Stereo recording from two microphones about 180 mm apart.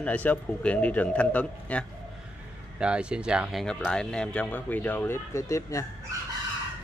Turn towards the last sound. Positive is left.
turn(degrees=15)  # may be behind; listen again after turning